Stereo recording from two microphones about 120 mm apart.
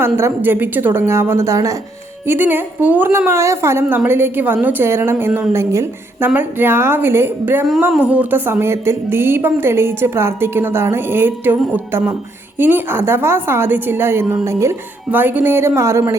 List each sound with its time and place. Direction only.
0.0 s a woman's voice: 20° right (ahead or behind)